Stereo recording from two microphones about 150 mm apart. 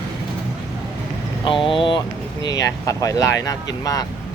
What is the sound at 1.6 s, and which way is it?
Vehicle, 35° left (ahead or behind).